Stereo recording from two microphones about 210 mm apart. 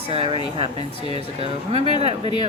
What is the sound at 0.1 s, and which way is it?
Speech, 30° right (ahead or behind).